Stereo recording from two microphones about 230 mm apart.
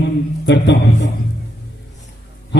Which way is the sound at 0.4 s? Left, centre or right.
Left.